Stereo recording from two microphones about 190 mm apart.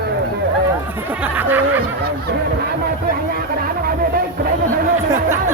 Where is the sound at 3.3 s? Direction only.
50° right (ahead or behind).